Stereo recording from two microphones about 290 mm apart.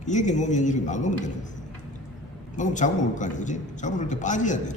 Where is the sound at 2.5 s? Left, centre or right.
Left.